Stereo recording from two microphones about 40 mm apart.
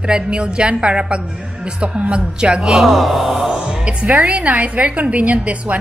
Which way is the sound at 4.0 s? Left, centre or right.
Right.